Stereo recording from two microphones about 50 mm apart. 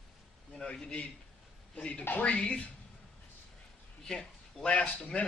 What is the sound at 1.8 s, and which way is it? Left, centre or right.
Speech, left.